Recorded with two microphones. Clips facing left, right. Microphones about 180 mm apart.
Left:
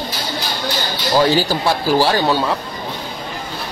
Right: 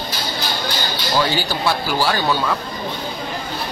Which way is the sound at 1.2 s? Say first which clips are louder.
Left 4 dB; 40° left (ahead or behind).